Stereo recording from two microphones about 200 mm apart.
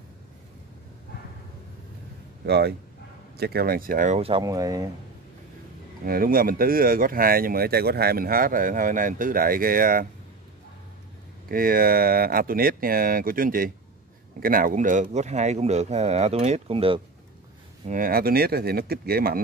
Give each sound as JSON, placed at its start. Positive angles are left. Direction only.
{"t": 2.4, "sound": "speech", "side_deg": -55}
{"t": 6.0, "sound": "speech", "side_deg": -45}
{"t": 11.4, "sound": "speech", "side_deg": -45}
{"t": 17.8, "sound": "speech", "side_deg": -45}